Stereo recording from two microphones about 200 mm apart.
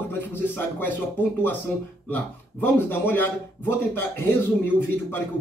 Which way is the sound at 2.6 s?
10° left (ahead or behind).